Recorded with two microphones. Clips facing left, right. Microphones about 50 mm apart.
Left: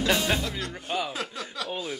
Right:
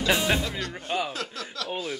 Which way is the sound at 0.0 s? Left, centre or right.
Centre.